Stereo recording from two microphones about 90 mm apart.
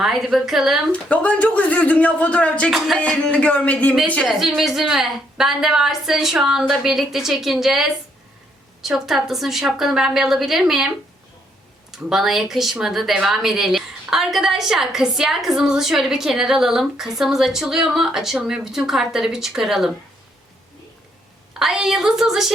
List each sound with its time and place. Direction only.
0.0 s speech: 5° right (ahead or behind)
1.1 s speech: 15° left (ahead or behind)
2.6 s speech: centre (ahead or behind)
3.3 s speech: 15° left (ahead or behind)
4.3 s speech: 5° right (ahead or behind)
11.9 s speech: 5° right (ahead or behind)
21.6 s speech: 5° right (ahead or behind)